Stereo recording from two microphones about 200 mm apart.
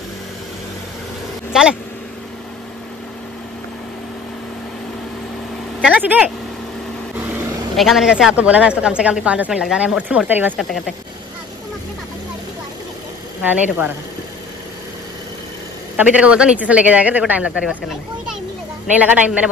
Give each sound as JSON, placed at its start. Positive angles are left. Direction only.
{"t": 1.5, "sound": "speech", "side_deg": 0}
{"t": 5.9, "sound": "speech", "side_deg": -10}
{"t": 7.2, "sound": "vehicle", "side_deg": -10}
{"t": 7.7, "sound": "speech", "side_deg": 0}
{"t": 13.4, "sound": "a man's voice", "side_deg": -10}
{"t": 16.0, "sound": "a man's voice", "side_deg": -5}